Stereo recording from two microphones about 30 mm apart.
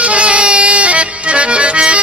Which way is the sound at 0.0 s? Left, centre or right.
Right.